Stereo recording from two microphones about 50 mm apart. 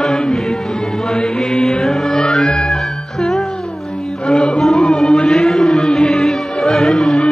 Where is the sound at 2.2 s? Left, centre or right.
Centre.